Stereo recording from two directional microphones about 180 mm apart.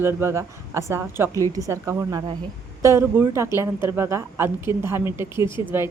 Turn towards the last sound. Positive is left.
turn(degrees=-15)  # may be behind; listen again after turning